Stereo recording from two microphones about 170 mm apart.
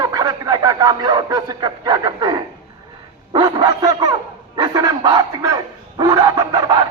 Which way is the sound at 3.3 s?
25° right (ahead or behind).